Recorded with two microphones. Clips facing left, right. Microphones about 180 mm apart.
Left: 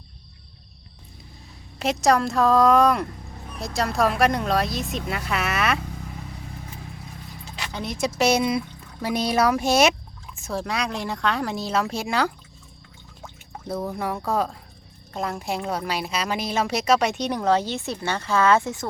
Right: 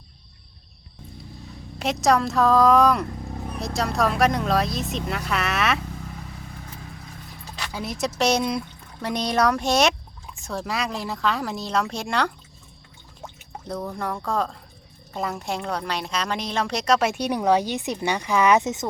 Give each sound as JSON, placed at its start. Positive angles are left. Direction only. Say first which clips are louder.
{"t": 1.8, "sound": "a woman's voice", "louder": "even", "side_deg": 0}
{"t": 7.7, "sound": "a woman's voice", "louder": "left 1 dB", "side_deg": -5}
{"t": 13.7, "sound": "a woman's voice", "louder": "left 2 dB", "side_deg": 5}